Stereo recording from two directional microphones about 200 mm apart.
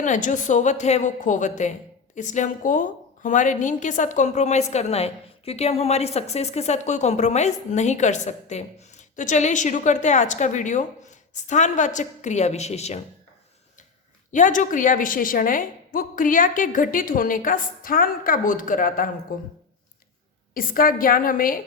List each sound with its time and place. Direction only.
0.0 s a woman's voice: 40° left (ahead or behind)
14.3 s a woman's voice: 40° left (ahead or behind)
20.5 s a woman's voice: 45° left (ahead or behind)